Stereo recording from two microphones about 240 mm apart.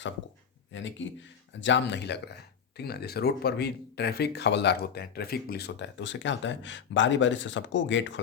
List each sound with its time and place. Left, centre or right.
0.7 s speech: left